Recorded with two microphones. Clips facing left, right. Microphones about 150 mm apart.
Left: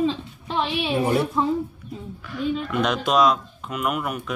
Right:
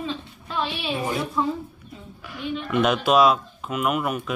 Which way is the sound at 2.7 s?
5° right (ahead or behind).